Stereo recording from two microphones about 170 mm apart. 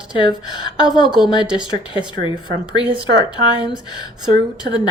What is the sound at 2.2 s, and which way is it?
Speech, 30° left (ahead or behind).